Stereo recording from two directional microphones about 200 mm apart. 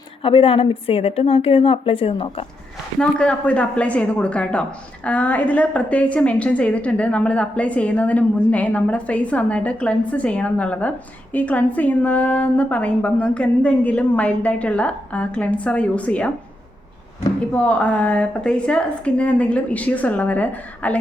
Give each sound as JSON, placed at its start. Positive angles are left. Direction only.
{"t": 0.2, "sound": "a woman's voice", "side_deg": 25}
{"t": 3.0, "sound": "a woman's voice", "side_deg": 5}
{"t": 17.5, "sound": "a woman's voice", "side_deg": 5}